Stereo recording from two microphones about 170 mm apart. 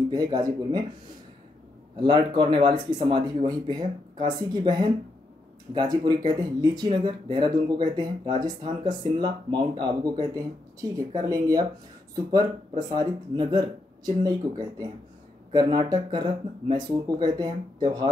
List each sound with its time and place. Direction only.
0.1 s speech: 20° right (ahead or behind)
2.0 s speech: 30° right (ahead or behind)